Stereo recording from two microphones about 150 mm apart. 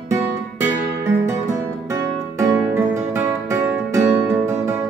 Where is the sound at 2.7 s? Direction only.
20° right (ahead or behind).